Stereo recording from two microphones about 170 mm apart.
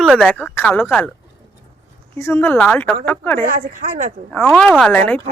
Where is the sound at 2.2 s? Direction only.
15° left (ahead or behind).